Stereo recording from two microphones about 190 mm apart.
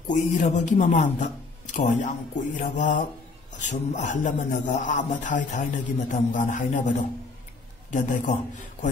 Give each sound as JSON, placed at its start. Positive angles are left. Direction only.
{"t": 0.1, "sound": "a man's voice", "side_deg": 40}